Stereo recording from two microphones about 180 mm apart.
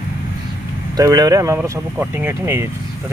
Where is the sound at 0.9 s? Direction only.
20° right (ahead or behind).